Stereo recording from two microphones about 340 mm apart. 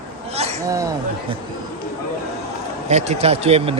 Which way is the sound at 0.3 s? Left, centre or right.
Centre.